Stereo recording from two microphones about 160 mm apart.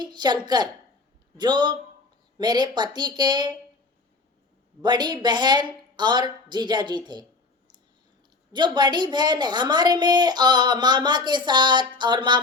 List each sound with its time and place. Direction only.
0.0 s a woman's voice: 25° right (ahead or behind)
4.8 s a woman's voice: 25° right (ahead or behind)
8.5 s a woman's voice: 30° right (ahead or behind)